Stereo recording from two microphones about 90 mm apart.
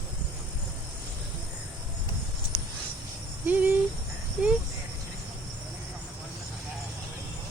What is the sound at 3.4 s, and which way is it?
Cricket, 20° right (ahead or behind).